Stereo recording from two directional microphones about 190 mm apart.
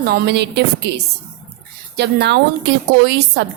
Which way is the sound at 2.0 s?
60° right (ahead or behind).